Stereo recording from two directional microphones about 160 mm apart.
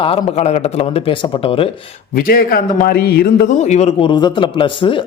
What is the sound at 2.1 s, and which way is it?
A man's voice, 65° left (ahead or behind).